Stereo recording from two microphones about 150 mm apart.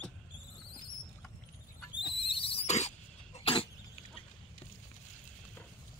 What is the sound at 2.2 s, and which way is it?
Squeal, 35° left (ahead or behind).